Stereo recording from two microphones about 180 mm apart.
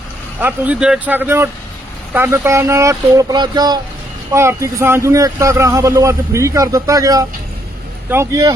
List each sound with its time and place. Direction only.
0.3 s speech: 10° right (ahead or behind)